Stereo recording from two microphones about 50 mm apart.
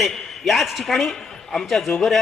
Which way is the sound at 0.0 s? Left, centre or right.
Centre.